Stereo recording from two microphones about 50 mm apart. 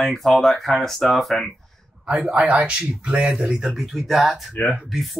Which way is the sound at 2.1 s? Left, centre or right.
Right.